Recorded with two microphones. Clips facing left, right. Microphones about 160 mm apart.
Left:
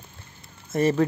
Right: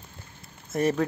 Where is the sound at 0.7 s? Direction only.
Centre (ahead or behind).